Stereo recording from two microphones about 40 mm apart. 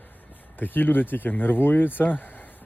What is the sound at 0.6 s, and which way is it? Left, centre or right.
Speech, left.